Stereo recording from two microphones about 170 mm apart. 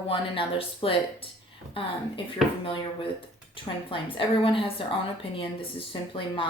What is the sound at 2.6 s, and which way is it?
Speech, 30° left (ahead or behind).